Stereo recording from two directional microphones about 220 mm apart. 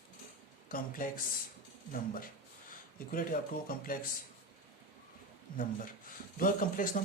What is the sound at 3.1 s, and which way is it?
Speech, 40° left (ahead or behind).